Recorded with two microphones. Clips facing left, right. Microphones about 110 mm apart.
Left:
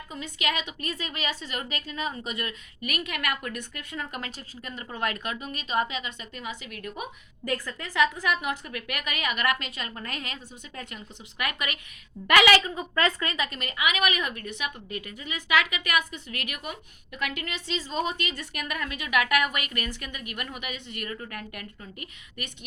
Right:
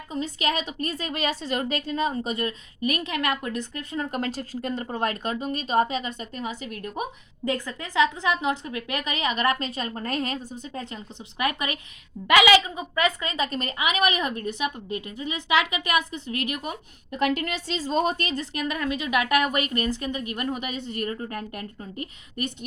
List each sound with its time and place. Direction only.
0.1 s a woman's voice: 35° right (ahead or behind)
7.4 s a woman's voice: 20° right (ahead or behind); by 22.5 s 35° right (ahead or behind)